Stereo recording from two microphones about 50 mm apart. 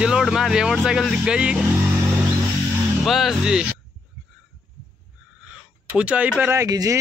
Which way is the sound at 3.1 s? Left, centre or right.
Centre.